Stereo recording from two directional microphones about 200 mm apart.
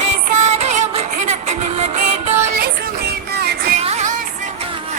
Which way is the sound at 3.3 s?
55° right (ahead or behind).